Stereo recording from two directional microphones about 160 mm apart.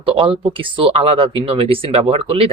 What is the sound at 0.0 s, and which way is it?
Speech, 35° right (ahead or behind).